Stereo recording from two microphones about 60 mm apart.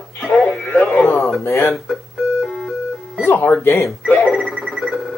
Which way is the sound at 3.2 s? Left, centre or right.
Left.